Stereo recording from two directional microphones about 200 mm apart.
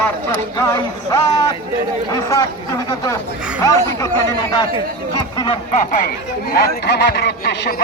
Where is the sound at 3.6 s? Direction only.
15° left (ahead or behind).